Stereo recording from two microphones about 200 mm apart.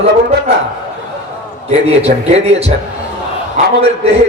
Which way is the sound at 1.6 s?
30° right (ahead or behind).